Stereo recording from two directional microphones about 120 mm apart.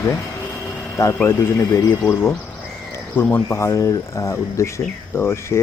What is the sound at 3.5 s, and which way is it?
Speech, 25° left (ahead or behind).